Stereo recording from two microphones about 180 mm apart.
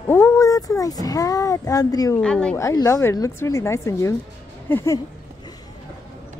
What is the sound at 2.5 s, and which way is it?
A woman's voice, 20° left (ahead or behind).